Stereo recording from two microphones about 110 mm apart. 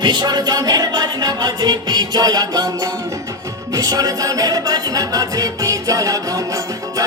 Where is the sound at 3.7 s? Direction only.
35° right (ahead or behind).